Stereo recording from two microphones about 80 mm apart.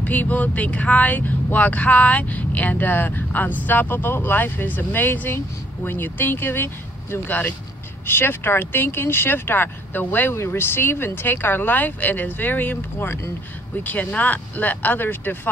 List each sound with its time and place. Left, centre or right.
0.0 s speech: left